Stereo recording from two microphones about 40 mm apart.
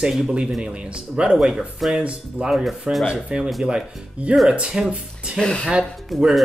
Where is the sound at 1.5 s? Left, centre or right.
Centre.